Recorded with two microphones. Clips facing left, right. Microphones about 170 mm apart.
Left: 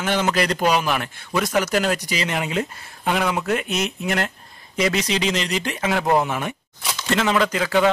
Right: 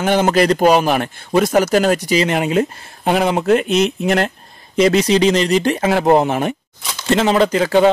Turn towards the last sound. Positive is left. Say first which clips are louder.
# right 6 dB
turn(degrees=-30)  # may be behind; listen again after turning